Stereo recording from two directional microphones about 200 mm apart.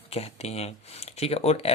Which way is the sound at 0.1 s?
30° left (ahead or behind).